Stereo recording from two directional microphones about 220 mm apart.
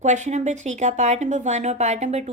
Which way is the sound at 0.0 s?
30° right (ahead or behind).